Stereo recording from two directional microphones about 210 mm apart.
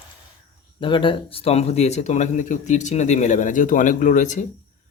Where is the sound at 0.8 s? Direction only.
25° left (ahead or behind).